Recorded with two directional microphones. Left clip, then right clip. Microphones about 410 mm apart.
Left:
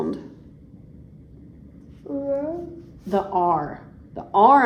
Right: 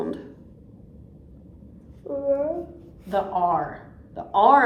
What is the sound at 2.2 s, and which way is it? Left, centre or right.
A woman's voice, left.